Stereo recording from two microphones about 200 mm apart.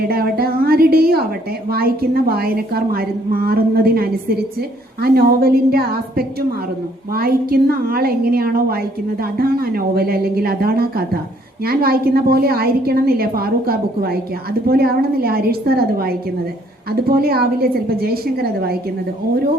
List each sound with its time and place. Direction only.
0.0 s a woman's voice: 50° right (ahead or behind)